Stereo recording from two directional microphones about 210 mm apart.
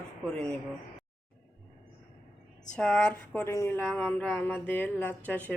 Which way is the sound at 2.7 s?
5° left (ahead or behind).